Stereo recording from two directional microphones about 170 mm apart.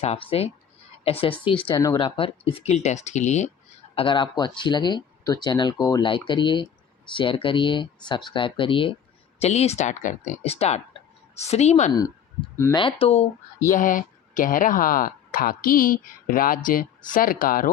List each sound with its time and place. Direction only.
0.0 s speech: 35° left (ahead or behind)
1.7 s speech: 20° left (ahead or behind)
2.0 s speech: 30° left (ahead or behind)
3.9 s speech: 30° left (ahead or behind)
13.7 s speech: 50° left (ahead or behind)